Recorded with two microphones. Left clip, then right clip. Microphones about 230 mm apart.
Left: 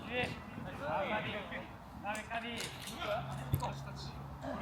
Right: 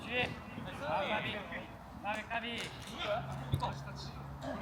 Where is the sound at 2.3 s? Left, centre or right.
Centre.